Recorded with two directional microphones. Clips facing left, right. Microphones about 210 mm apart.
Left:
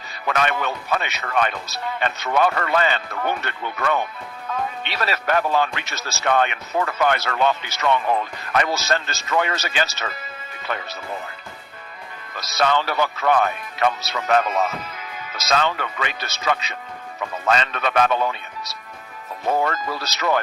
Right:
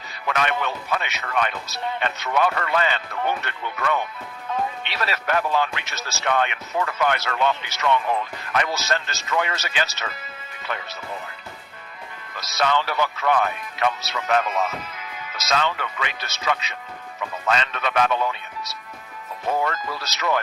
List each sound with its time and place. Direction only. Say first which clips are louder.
0.3 s speech: left 2 dB; 40° left (ahead or behind)
12.4 s speech: left 2 dB; 35° left (ahead or behind)